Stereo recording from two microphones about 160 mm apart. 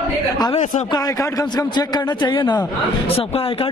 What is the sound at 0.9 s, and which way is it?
A man's voice, 25° left (ahead or behind).